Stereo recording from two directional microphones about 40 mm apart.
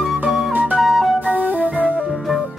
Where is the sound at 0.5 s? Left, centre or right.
Right.